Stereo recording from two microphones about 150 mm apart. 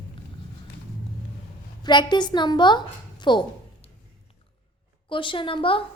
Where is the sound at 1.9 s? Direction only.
30° left (ahead or behind).